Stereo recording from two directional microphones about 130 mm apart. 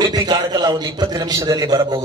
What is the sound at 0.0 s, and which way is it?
A man's voice, 30° right (ahead or behind).